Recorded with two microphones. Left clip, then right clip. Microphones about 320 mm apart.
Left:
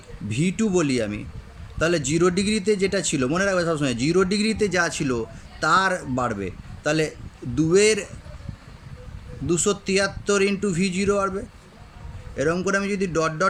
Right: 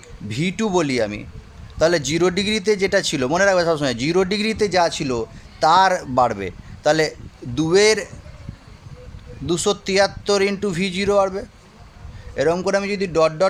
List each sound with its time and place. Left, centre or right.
0.3 s speech: centre
9.5 s speech: centre